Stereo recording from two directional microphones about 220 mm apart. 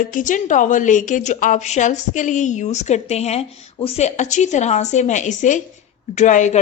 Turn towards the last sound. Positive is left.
turn(degrees=35)  # may be behind; listen again after turning